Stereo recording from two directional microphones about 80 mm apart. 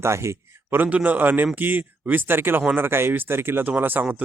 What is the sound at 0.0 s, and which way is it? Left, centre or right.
Speech, right.